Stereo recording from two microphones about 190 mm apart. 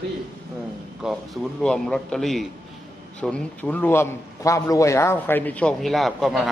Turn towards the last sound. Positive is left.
turn(degrees=0)  # may be behind; listen again after turning